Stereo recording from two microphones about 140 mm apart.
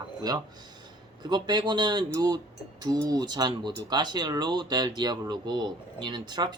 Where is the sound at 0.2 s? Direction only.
25° right (ahead or behind).